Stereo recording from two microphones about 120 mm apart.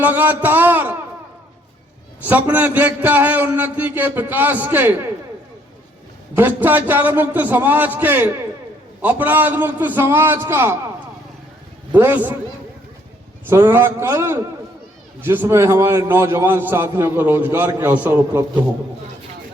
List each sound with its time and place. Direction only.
0.0 s a man's voice: 15° right (ahead or behind)
2.2 s a man's voice: 15° right (ahead or behind)
6.3 s a man's voice: 15° right (ahead or behind)
13.5 s a man's voice: 20° right (ahead or behind)